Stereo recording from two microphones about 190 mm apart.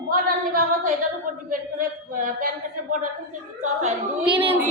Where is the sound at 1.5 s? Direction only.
45° right (ahead or behind).